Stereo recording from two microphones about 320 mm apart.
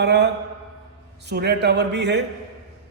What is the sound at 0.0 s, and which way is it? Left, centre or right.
Speech, right.